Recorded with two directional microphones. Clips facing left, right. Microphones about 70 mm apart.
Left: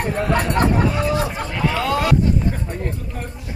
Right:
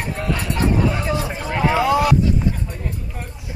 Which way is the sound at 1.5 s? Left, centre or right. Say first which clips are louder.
Right 5 dB; right.